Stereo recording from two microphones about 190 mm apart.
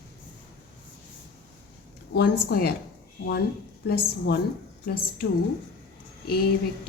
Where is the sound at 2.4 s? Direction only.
55° left (ahead or behind).